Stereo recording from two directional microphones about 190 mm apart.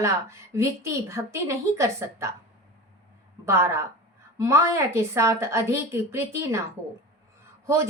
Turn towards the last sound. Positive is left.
turn(degrees=-15)  # may be behind; listen again after turning